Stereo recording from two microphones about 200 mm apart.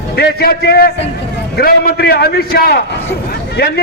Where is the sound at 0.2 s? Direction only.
50° left (ahead or behind).